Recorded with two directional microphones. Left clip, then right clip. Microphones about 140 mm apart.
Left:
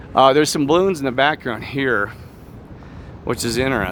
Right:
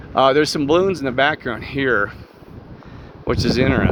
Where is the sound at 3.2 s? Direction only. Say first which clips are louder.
Right 2 dB; 15° left (ahead or behind).